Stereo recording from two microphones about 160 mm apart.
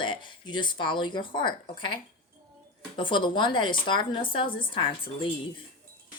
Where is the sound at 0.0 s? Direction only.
30° left (ahead or behind).